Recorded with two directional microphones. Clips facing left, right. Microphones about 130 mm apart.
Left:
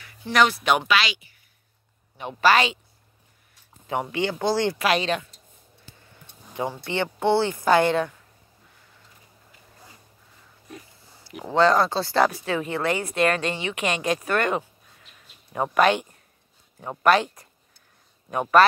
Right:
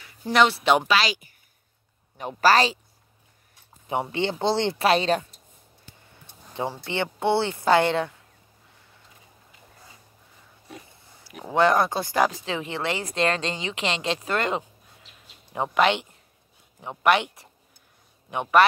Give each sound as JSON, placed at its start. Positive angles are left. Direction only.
{"t": 0.3, "sound": "speech", "side_deg": -25}
{"t": 3.8, "sound": "speech", "side_deg": -25}
{"t": 6.5, "sound": "speech", "side_deg": -25}
{"t": 11.5, "sound": "speech", "side_deg": -20}
{"t": 18.6, "sound": "speech", "side_deg": -20}